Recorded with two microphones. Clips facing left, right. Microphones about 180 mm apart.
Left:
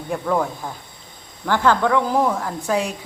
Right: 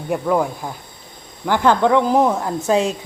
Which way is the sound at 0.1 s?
10° right (ahead or behind).